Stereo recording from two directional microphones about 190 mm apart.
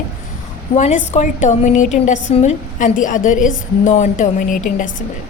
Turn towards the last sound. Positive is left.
turn(degrees=45)  # may be behind; listen again after turning